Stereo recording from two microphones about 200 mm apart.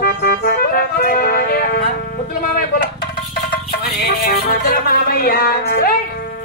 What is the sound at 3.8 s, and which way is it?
Music, 50° left (ahead or behind).